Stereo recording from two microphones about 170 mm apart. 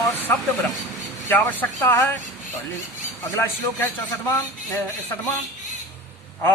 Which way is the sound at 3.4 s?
15° left (ahead or behind).